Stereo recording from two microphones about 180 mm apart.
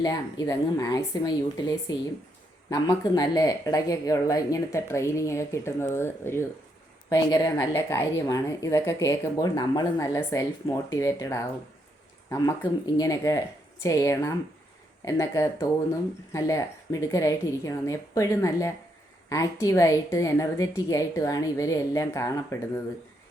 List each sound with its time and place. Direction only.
0.0 s a woman's voice: 20° left (ahead or behind)